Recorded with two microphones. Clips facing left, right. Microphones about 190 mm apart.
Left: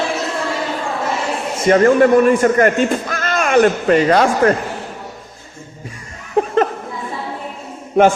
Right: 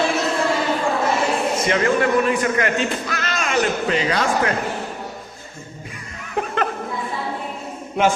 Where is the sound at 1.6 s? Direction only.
45° left (ahead or behind).